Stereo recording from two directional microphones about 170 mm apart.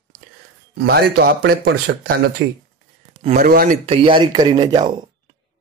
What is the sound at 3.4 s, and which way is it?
Speech, 60° right (ahead or behind).